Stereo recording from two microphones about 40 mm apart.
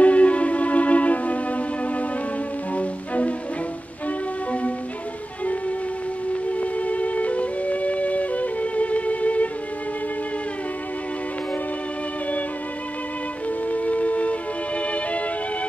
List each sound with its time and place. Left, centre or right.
0.0 s music: left
4.5 s music: left
6.6 s music: left
13.7 s music: left